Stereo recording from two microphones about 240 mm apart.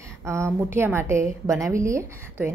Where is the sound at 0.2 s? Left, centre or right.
Centre.